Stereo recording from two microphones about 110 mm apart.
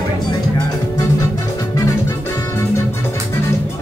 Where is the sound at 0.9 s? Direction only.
30° left (ahead or behind).